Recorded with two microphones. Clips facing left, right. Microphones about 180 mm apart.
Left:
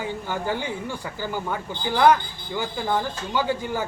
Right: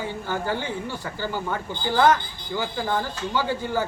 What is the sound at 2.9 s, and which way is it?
Speech, 15° left (ahead or behind).